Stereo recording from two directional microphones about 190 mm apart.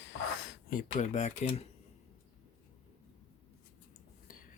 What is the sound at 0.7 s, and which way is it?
Speech, 40° left (ahead or behind).